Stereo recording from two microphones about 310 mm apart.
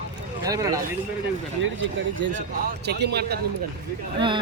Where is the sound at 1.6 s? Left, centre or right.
Right.